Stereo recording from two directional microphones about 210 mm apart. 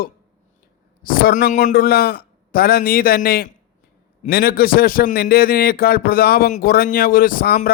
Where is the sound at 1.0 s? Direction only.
45° left (ahead or behind).